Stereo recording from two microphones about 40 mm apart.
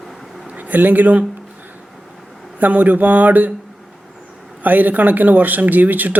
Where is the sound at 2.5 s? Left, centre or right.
Right.